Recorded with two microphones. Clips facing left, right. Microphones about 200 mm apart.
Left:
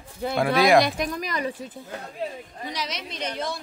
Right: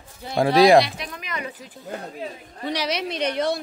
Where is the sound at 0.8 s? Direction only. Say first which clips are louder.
Right 1 dB; 45° left (ahead or behind).